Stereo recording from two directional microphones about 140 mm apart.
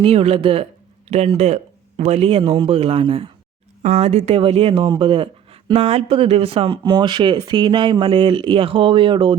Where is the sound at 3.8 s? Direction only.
50° right (ahead or behind).